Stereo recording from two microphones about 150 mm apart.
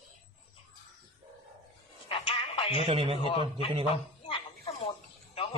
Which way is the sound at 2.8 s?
40° right (ahead or behind).